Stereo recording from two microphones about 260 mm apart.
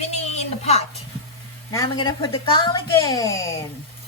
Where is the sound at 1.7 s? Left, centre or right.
Centre.